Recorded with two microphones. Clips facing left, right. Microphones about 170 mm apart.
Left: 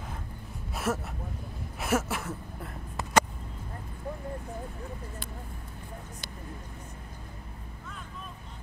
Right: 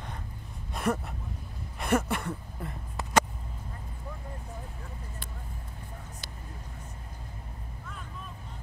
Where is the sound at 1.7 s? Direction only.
5° left (ahead or behind).